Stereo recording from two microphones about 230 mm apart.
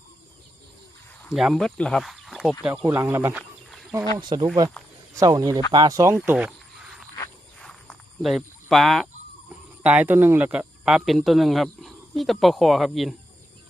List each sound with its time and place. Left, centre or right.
1.3 s speech: centre
2.8 s speech: centre
4.2 s speech: centre
6.1 s frog: centre
7.6 s a sound: centre
9.5 s speech: centre